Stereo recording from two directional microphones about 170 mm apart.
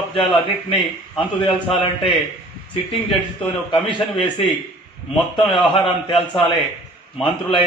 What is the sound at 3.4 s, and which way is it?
A man's voice, 30° left (ahead or behind).